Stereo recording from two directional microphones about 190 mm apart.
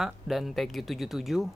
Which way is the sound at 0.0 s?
Centre (ahead or behind).